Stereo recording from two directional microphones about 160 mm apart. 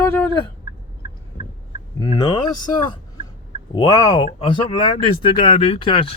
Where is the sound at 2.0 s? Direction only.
25° left (ahead or behind).